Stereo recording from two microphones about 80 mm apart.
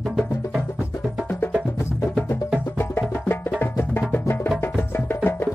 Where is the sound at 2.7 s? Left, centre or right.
Left.